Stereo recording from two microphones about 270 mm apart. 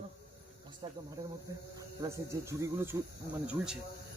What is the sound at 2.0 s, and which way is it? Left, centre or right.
A man's voice, centre.